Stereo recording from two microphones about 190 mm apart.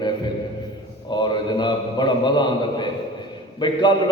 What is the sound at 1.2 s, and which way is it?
A man's voice, 25° left (ahead or behind).